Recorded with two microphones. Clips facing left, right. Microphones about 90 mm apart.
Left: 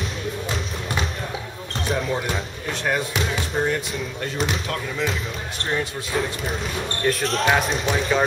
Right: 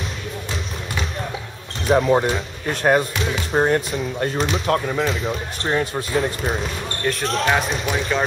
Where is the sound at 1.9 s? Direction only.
45° right (ahead or behind).